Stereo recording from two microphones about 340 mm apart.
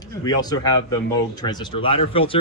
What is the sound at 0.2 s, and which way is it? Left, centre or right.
Speech, centre.